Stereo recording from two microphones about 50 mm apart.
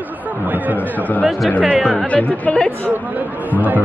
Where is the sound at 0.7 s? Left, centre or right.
Left.